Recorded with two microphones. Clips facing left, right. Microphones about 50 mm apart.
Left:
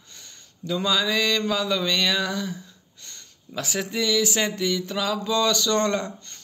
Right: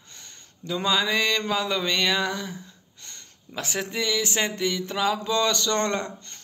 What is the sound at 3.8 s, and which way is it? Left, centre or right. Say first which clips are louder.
A man's voice: left 3 dB; right.